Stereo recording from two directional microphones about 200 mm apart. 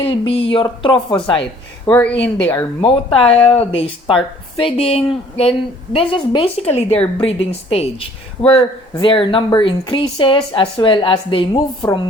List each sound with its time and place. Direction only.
0.0 s speech: 25° left (ahead or behind)
1.9 s speech: 5° left (ahead or behind)
2.8 s speech: 25° left (ahead or behind)